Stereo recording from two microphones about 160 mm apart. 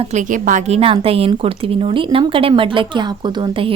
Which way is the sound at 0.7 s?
35° right (ahead or behind).